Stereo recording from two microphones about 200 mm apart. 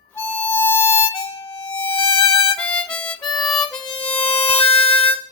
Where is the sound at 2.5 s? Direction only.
5° left (ahead or behind).